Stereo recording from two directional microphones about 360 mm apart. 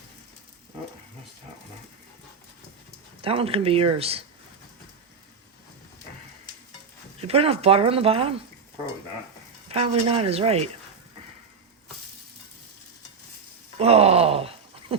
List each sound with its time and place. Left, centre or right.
3.2 s speech: centre
7.2 s speech: centre
9.6 s speech: centre
13.7 s groan: centre